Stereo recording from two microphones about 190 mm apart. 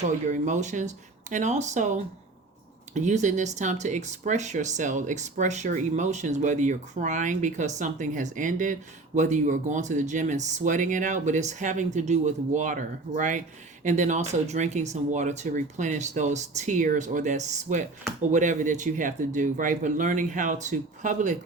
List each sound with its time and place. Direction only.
0.0 s speech: 40° right (ahead or behind)